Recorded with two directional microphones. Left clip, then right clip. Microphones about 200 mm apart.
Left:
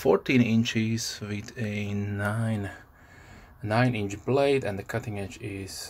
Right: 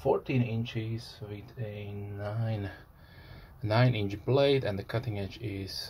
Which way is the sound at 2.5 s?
20° left (ahead or behind).